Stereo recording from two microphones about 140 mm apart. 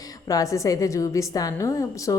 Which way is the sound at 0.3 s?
25° left (ahead or behind).